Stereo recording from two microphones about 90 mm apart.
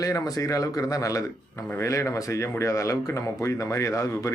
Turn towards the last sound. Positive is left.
turn(degrees=35)  # may be behind; listen again after turning